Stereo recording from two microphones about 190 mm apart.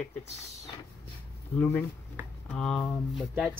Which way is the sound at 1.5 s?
10° left (ahead or behind).